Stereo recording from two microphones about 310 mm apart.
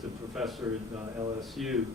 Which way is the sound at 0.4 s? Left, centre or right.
Centre.